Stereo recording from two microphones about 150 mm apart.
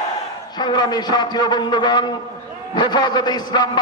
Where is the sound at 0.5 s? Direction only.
30° left (ahead or behind).